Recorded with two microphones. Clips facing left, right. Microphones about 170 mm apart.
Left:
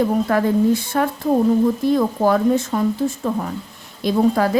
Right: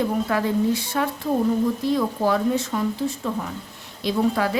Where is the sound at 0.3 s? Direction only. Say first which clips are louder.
Left 5 dB; 50° left (ahead or behind).